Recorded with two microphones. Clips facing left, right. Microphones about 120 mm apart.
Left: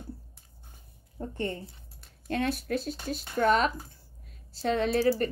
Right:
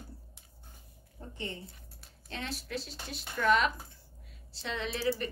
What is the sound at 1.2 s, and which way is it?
A woman's voice, 50° left (ahead or behind).